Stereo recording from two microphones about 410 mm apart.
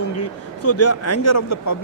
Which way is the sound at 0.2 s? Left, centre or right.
Left.